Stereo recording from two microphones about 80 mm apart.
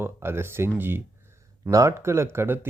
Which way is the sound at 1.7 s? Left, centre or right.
Right.